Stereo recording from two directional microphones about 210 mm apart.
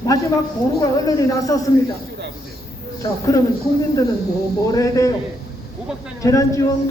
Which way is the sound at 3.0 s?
15° left (ahead or behind).